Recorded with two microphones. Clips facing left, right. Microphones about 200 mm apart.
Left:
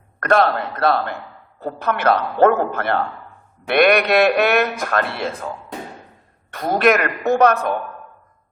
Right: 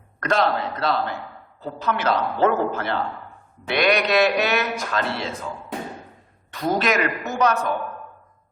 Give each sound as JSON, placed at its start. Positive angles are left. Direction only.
{"t": 0.2, "sound": "a man's voice", "side_deg": 55}
{"t": 6.5, "sound": "a man's voice", "side_deg": 55}